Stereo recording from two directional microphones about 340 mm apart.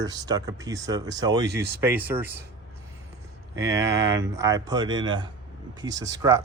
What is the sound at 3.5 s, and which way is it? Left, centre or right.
Speech, centre.